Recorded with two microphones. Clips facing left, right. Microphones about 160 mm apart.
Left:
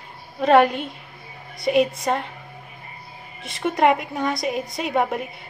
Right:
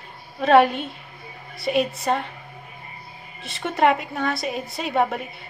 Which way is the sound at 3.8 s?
10° left (ahead or behind).